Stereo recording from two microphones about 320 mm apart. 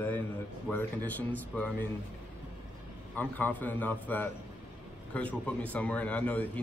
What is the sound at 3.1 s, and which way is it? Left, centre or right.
A man's voice, centre.